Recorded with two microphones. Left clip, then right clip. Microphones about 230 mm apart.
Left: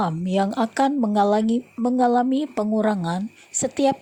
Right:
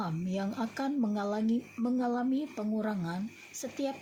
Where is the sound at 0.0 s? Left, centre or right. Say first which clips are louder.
Left 13 dB; left.